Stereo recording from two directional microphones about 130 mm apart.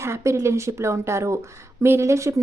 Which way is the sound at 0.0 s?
20° right (ahead or behind).